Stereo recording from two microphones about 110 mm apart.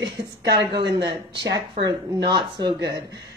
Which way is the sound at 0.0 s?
40° right (ahead or behind).